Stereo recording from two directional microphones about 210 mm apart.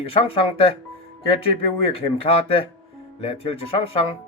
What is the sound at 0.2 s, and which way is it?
Speech, 25° left (ahead or behind).